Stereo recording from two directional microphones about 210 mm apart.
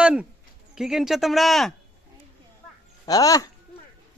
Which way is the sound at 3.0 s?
15° left (ahead or behind).